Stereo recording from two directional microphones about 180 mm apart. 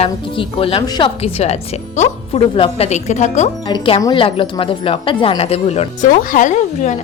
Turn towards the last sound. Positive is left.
turn(degrees=40)  # may be behind; listen again after turning